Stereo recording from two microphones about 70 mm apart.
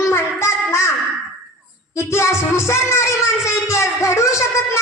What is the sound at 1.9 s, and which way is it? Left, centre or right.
Speech, left.